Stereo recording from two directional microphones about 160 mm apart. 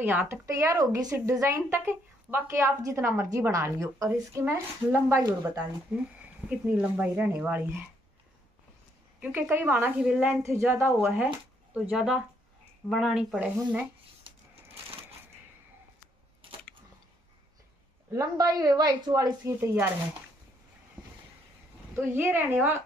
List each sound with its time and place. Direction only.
0.0 s a woman's voice: 15° right (ahead or behind)
5.9 s a woman's voice: 10° right (ahead or behind)
9.2 s a woman's voice: 10° right (ahead or behind)
18.1 s speech: 20° right (ahead or behind)
21.9 s a woman's voice: 15° right (ahead or behind)